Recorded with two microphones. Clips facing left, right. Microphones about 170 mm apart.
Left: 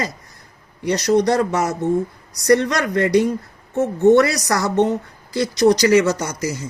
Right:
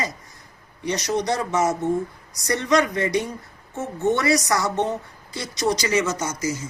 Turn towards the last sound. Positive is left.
turn(degrees=65)  # may be behind; listen again after turning